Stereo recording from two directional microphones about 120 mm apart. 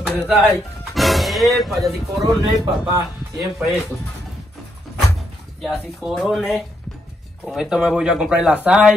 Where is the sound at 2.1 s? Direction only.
30° right (ahead or behind).